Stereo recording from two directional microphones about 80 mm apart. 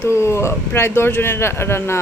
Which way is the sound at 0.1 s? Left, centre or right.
Left.